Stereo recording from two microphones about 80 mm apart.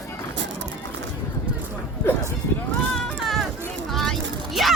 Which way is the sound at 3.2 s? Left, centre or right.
Centre.